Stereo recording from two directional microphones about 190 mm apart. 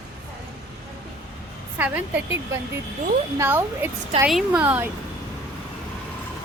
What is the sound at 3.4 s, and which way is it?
A woman's voice, 10° right (ahead or behind).